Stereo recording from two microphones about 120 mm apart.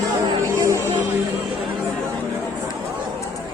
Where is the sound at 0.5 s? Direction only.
30° right (ahead or behind).